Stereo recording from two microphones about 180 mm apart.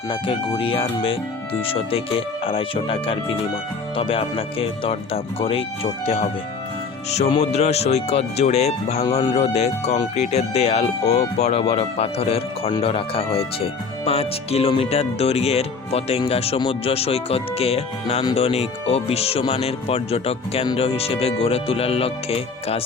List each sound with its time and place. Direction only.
0.1 s speech: 25° left (ahead or behind)